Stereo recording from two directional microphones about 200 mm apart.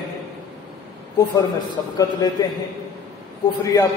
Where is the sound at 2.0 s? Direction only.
20° left (ahead or behind).